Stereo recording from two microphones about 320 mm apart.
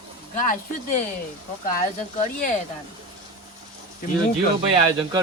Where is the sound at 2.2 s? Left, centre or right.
Left.